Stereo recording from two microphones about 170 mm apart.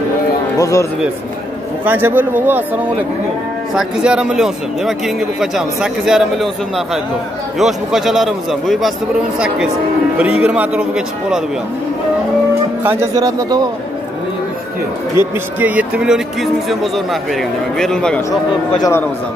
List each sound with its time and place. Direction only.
0.6 s speech: 20° left (ahead or behind)
1.9 s speech: 10° right (ahead or behind)
10.1 s speech: 5° right (ahead or behind)
12.8 s speech: 15° right (ahead or behind)
15.2 s speech: 15° right (ahead or behind); by 18.4 s 5° left (ahead or behind)
18.8 s speech: 15° left (ahead or behind)